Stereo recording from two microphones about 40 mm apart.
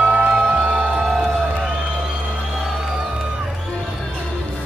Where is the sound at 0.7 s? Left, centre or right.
Right.